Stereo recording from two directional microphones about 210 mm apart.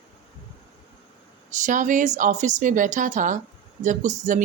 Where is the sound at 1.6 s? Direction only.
35° right (ahead or behind).